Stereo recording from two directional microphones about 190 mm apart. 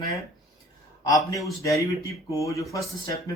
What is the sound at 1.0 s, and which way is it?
A man's voice, 20° left (ahead or behind).